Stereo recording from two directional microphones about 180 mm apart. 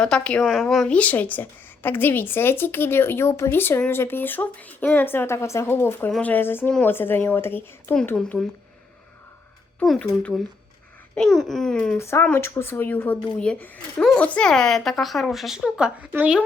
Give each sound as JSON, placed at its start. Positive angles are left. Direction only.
{"t": 0.0, "sound": "a woman's voice", "side_deg": 5}
{"t": 9.8, "sound": "speech", "side_deg": 5}
{"t": 11.9, "sound": "speech", "side_deg": 15}